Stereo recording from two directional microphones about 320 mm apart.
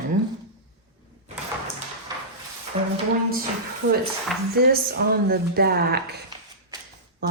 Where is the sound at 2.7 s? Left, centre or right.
Centre.